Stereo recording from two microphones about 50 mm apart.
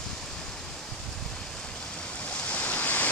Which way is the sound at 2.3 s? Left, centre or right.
Left.